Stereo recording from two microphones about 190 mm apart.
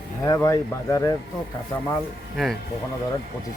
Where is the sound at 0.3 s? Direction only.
15° left (ahead or behind).